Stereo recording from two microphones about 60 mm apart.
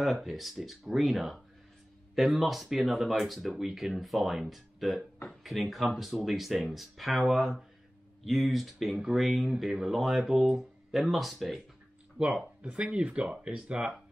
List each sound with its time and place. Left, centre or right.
0.0 s speech: centre
12.2 s speech: centre